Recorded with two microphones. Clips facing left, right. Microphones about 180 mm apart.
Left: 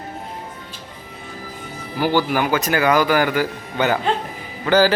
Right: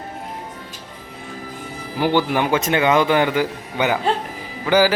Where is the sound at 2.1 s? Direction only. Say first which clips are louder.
Even; 25° right (ahead or behind).